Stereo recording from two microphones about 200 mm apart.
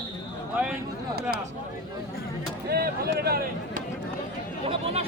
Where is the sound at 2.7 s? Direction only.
50° right (ahead or behind).